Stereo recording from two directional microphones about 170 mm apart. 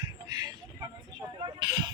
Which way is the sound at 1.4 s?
30° right (ahead or behind).